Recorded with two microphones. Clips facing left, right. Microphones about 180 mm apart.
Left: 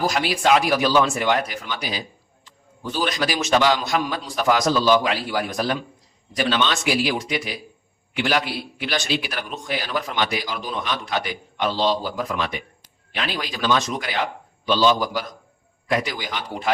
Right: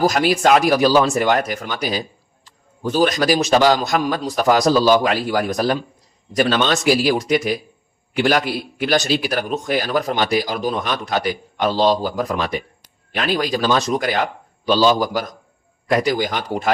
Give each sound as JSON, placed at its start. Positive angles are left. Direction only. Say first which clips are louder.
{"t": 0.0, "sound": "a man's voice", "louder": "right 5 dB", "side_deg": -45}